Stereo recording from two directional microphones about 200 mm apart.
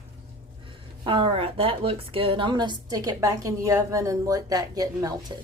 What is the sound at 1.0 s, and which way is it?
A woman's voice, 25° right (ahead or behind).